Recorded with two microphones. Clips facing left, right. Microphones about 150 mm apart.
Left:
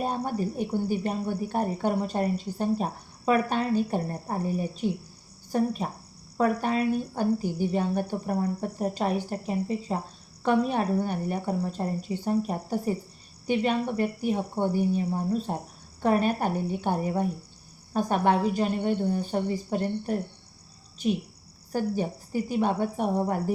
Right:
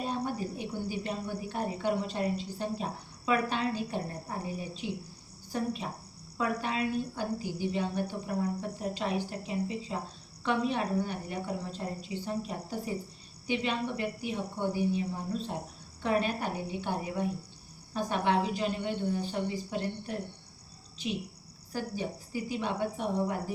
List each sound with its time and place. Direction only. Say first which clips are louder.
0.0 s speech: left 5 dB; 50° left (ahead or behind)